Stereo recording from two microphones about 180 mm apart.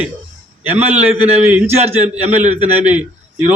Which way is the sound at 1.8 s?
35° right (ahead or behind).